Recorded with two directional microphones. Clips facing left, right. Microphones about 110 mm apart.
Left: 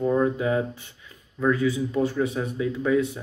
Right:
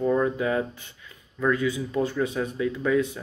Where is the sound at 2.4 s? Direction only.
10° left (ahead or behind).